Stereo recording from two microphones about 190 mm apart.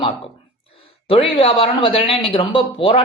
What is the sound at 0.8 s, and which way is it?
Speech, 30° left (ahead or behind).